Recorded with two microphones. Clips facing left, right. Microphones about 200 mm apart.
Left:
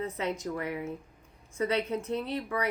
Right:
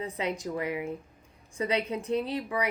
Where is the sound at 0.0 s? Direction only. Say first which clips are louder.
Even; 15° right (ahead or behind).